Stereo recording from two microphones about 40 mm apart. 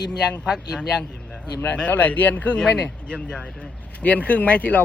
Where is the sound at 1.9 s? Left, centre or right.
Left.